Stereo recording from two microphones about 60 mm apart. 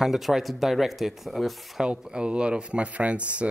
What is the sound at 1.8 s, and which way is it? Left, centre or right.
Speech, centre.